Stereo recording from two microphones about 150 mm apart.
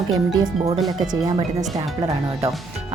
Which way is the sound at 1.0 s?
25° right (ahead or behind).